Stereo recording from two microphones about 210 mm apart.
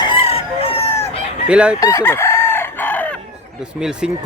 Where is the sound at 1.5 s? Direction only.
5° right (ahead or behind).